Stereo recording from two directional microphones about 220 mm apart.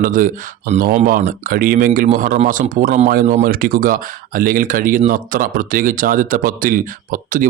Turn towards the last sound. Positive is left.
turn(degrees=-40)  # may be behind; listen again after turning